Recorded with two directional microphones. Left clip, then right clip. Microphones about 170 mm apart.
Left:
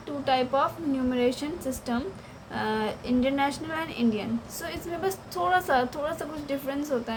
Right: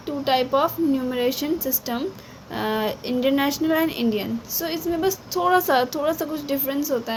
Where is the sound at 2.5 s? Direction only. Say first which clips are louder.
Right 4 dB; 40° right (ahead or behind).